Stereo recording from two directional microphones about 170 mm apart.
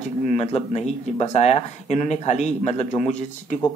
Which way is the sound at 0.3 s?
35° left (ahead or behind).